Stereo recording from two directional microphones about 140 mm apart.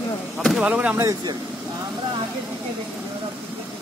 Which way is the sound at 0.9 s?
25° right (ahead or behind).